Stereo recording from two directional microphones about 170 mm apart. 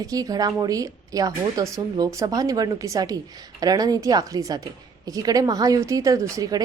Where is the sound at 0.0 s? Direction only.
20° right (ahead or behind).